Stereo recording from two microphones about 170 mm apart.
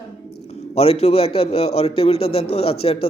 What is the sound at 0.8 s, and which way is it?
A man's voice, 35° left (ahead or behind).